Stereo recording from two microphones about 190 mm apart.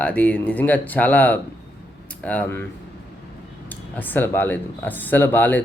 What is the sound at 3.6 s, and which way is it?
Speech, 10° left (ahead or behind).